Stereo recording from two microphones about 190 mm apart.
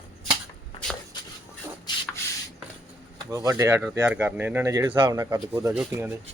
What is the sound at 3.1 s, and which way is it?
Speech, 15° right (ahead or behind).